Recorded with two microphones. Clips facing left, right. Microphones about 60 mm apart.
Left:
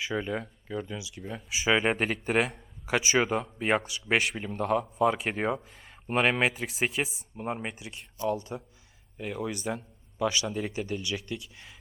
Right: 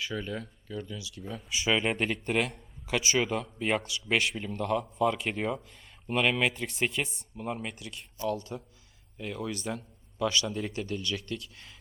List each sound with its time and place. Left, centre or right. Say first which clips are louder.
0.0 s speech: left 4 dB; centre
1.2 s speech: left 1 dB; centre
1.5 s a man's voice: left 3 dB; centre
7.3 s a man's voice: left 2 dB; left; by 11.8 s centre